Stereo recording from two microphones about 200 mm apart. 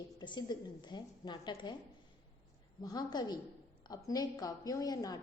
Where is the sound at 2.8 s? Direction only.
20° left (ahead or behind).